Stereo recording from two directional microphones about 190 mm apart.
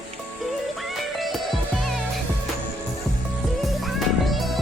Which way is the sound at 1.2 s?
Centre (ahead or behind).